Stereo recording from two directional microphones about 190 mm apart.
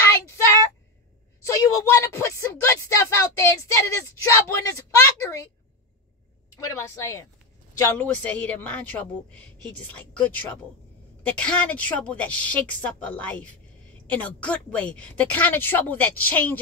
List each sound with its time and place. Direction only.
1.4 s a sound: 15° left (ahead or behind)
3.7 s a woman's voice: 15° left (ahead or behind)
6.5 s a woman's voice: 15° left (ahead or behind)